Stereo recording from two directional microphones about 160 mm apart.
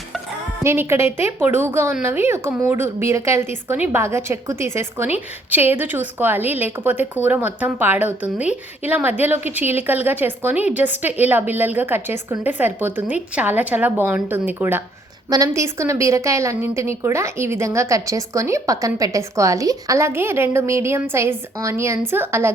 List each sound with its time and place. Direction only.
0.6 s a woman's voice: 15° right (ahead or behind)